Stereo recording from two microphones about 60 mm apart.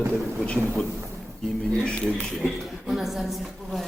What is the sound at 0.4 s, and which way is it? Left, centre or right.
A man's voice, centre.